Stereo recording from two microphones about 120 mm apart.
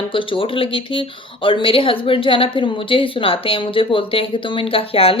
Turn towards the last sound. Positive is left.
turn(degrees=50)  # may be behind; listen again after turning